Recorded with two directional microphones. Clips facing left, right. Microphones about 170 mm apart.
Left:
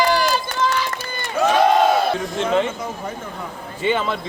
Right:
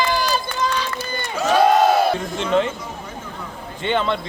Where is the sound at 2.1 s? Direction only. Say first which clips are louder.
Even; centre (ahead or behind).